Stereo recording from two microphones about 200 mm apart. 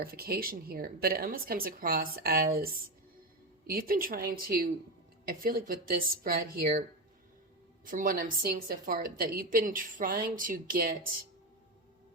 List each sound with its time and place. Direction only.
0.0 s a woman's voice: 50° right (ahead or behind)
7.9 s a woman's voice: 45° right (ahead or behind)